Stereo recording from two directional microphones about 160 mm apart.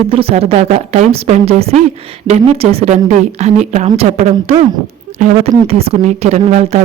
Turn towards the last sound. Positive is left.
turn(degrees=-45)  # may be behind; listen again after turning